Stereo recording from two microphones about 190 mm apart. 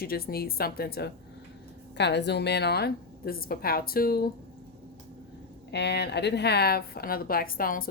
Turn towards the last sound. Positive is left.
turn(degrees=50)  # may be behind; listen again after turning